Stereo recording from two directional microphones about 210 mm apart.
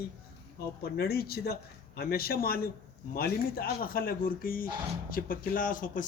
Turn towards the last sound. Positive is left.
turn(degrees=40)  # may be behind; listen again after turning